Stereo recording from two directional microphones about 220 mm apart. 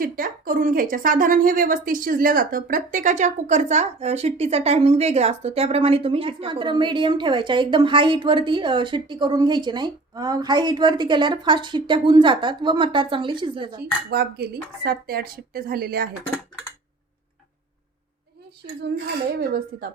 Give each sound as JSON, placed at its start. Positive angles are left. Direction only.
{"t": 0.0, "sound": "speech", "side_deg": -40}
{"t": 13.7, "sound": "speech", "side_deg": -45}
{"t": 19.3, "sound": "speech", "side_deg": -45}